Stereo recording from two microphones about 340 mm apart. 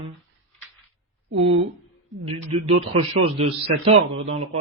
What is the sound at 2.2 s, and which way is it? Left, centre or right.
Speech, centre.